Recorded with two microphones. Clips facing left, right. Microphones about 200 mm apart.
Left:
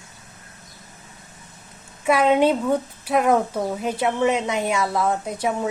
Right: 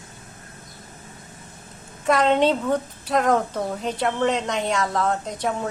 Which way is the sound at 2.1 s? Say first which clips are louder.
Left 1 dB; 10° left (ahead or behind).